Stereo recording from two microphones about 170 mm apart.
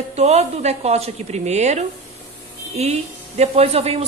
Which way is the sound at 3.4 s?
35° right (ahead or behind).